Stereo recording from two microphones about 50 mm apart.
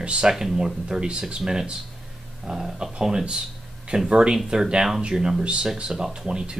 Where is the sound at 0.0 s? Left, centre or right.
Centre.